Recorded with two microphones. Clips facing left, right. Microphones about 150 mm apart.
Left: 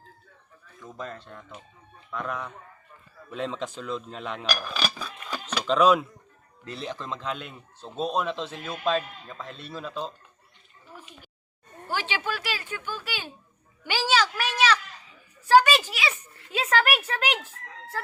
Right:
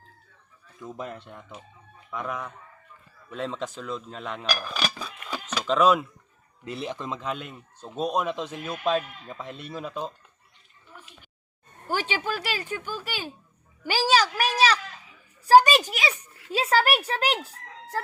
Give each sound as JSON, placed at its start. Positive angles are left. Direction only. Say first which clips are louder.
{"t": 0.9, "sound": "a man's voice", "louder": "left 1 dB", "side_deg": -15}
{"t": 11.9, "sound": "speech", "louder": "right 2 dB", "side_deg": -40}
{"t": 15.4, "sound": "a sound", "louder": "right 2 dB", "side_deg": -40}
{"t": 15.9, "sound": "a child's voice", "louder": "right 2 dB", "side_deg": -45}